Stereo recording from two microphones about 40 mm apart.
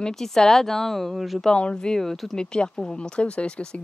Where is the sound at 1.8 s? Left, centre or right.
Centre.